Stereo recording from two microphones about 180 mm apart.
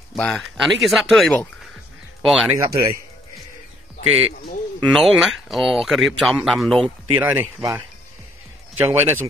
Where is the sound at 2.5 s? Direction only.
20° right (ahead or behind).